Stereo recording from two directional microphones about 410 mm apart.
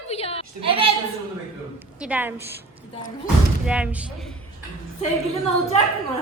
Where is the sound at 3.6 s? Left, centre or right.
Centre.